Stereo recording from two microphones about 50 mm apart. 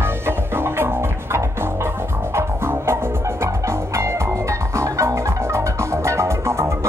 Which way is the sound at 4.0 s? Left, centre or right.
Right.